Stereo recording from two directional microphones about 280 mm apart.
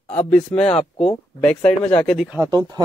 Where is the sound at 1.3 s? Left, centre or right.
Centre.